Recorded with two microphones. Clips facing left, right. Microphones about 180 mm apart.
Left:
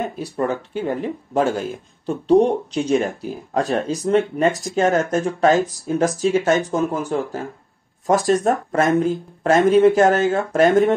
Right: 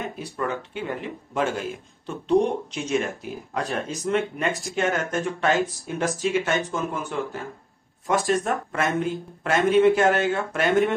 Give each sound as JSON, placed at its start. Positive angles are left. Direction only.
{"t": 0.0, "sound": "speech", "side_deg": 35}